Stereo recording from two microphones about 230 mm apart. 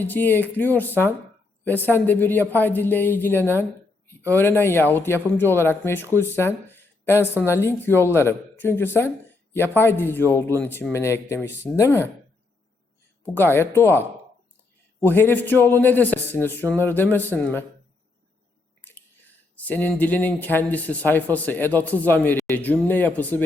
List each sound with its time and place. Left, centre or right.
0.0 s speech: centre
13.2 s speech: centre
15.0 s speech: centre
19.5 s speech: centre